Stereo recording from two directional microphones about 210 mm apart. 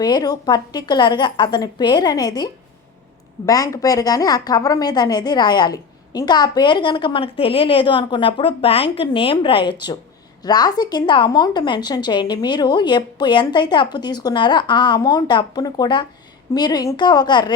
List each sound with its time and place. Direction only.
0.0 s a woman's voice: 20° left (ahead or behind)